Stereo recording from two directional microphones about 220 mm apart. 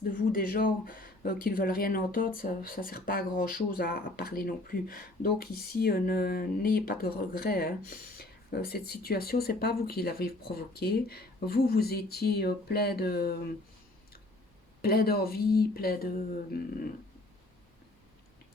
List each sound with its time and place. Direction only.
0.0 s speech: 40° left (ahead or behind)
14.8 s speech: 45° left (ahead or behind)